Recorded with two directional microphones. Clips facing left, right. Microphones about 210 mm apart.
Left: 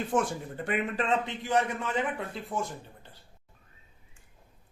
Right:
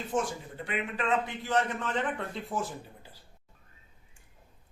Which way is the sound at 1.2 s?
15° left (ahead or behind).